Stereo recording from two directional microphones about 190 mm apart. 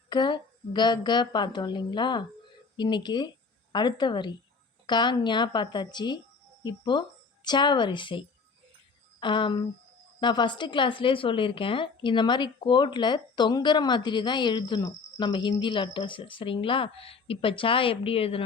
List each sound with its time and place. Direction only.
0.1 s a woman's voice: 25° left (ahead or behind)
9.2 s a woman's voice: 25° left (ahead or behind)